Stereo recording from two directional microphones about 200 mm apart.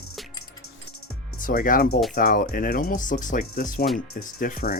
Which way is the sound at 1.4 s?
45° left (ahead or behind).